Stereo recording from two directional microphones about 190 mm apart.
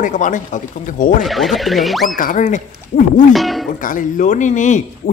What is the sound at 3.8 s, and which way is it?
Speech, 45° left (ahead or behind).